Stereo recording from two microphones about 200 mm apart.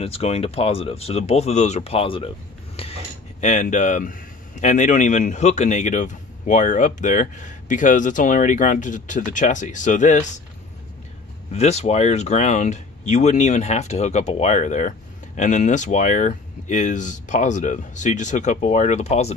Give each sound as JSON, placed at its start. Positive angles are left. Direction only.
{"t": 0.0, "sound": "speech", "side_deg": 30}
{"t": 11.5, "sound": "speech", "side_deg": 35}